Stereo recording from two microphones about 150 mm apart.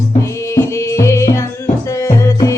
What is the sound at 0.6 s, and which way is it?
Music, 20° left (ahead or behind).